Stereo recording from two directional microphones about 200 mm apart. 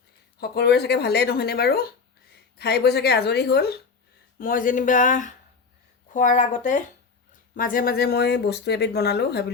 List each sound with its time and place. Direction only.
0.3 s speech: 55° left (ahead or behind)
4.4 s speech: 45° left (ahead or behind)